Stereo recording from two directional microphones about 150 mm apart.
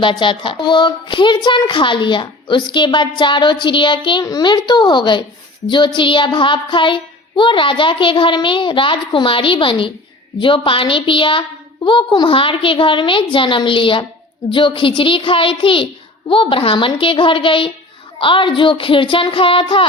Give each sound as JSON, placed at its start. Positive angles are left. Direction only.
{"t": 0.0, "sound": "a woman's voice", "side_deg": 35}